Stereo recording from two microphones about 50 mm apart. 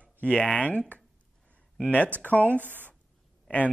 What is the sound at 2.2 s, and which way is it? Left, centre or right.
Speech, left.